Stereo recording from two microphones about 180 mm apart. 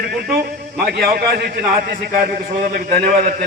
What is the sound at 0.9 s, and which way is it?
Speech, 65° right (ahead or behind).